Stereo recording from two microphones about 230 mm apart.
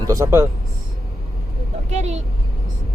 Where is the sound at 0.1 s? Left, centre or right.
Centre.